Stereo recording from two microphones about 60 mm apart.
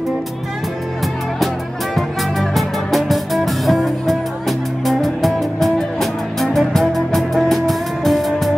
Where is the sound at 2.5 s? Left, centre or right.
Centre.